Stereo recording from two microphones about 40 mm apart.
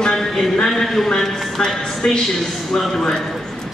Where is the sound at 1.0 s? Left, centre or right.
Centre.